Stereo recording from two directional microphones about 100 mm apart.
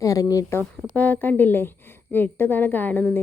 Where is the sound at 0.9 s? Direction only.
15° left (ahead or behind).